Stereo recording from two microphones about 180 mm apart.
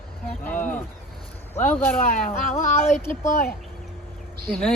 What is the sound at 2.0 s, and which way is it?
Speech, 50° left (ahead or behind).